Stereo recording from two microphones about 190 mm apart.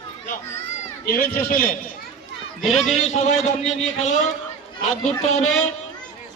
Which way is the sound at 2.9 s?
35° left (ahead or behind).